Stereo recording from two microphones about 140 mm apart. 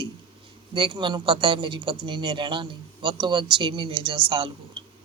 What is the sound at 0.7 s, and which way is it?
A man's voice, 35° right (ahead or behind).